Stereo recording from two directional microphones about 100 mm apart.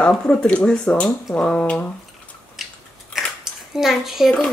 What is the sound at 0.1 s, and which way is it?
Speech, 10° left (ahead or behind).